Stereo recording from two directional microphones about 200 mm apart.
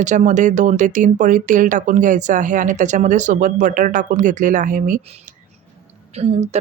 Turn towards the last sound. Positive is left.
turn(degrees=-35)  # may be behind; listen again after turning